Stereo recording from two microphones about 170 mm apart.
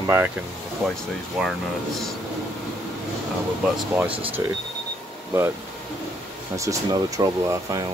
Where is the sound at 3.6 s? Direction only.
10° right (ahead or behind).